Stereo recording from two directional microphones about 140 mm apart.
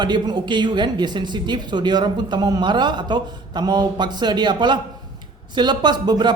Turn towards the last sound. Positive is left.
turn(degrees=-30)  # may be behind; listen again after turning